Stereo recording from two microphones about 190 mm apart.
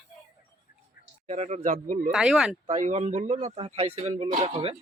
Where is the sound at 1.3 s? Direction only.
35° right (ahead or behind).